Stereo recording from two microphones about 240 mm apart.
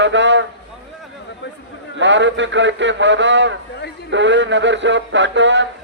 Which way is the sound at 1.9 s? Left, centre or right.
Right.